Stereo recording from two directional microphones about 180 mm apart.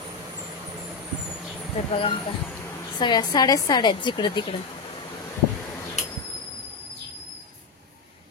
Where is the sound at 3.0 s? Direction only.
25° left (ahead or behind).